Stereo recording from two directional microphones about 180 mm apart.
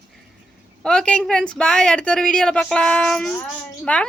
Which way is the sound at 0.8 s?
5° left (ahead or behind).